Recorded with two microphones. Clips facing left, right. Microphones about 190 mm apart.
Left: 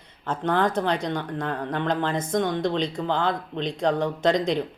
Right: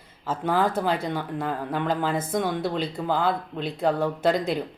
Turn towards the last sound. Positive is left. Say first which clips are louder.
# left 1 dB
turn(degrees=-5)  # may be behind; listen again after turning